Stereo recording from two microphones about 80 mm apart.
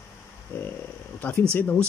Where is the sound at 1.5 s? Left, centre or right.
Left.